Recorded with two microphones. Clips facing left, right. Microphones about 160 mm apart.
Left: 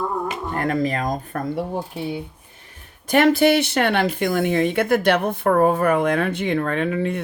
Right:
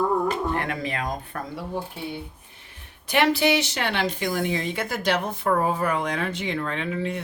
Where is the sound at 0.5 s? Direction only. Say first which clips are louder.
Left 6 dB; 40° left (ahead or behind).